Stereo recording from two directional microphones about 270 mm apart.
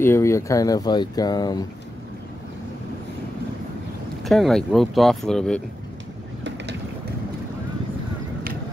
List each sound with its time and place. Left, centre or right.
0.0 s speech: centre
4.2 s speech: centre
6.4 s vehicle: right